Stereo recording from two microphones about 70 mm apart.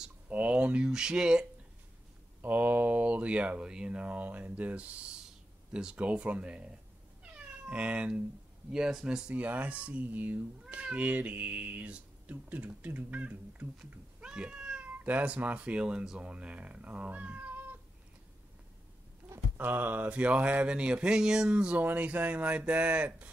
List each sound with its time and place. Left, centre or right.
0.3 s speech: centre
2.4 s speech: right
7.3 s cat: centre
8.7 s speech: centre
9.3 s speech: right
19.2 s a sound: right
19.6 s speech: right